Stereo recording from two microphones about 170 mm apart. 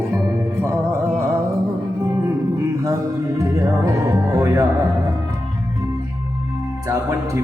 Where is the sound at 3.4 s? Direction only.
15° right (ahead or behind).